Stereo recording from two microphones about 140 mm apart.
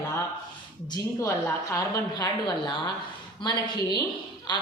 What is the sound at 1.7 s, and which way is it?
Speech, 25° left (ahead or behind).